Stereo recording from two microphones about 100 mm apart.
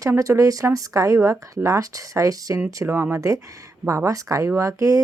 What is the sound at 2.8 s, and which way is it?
A woman's voice, 25° right (ahead or behind).